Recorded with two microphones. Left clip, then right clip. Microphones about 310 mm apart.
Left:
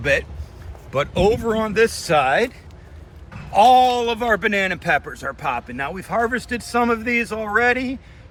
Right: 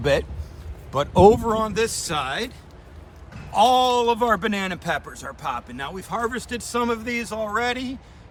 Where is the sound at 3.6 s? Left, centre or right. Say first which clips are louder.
Left 4 dB; centre.